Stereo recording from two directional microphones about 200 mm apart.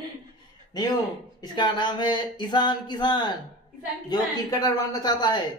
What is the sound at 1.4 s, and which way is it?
Speech, 20° left (ahead or behind).